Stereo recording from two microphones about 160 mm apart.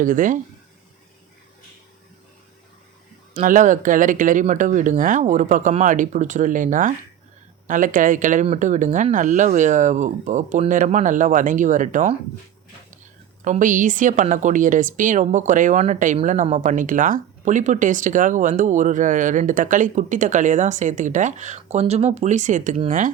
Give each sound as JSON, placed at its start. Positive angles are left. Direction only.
{"t": 0.0, "sound": "speech", "side_deg": -55}
{"t": 3.4, "sound": "speech", "side_deg": -55}
{"t": 13.4, "sound": "speech", "side_deg": -50}